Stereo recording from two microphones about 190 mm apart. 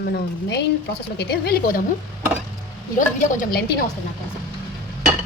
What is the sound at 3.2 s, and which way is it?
Speech, 45° left (ahead or behind).